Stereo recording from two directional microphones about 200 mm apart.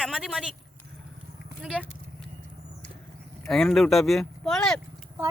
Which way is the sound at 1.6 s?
5° right (ahead or behind).